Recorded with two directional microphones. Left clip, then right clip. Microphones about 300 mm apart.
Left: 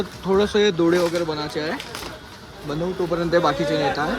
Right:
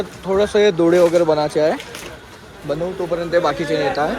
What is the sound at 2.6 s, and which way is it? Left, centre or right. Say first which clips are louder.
Speech: right 3 dB; centre.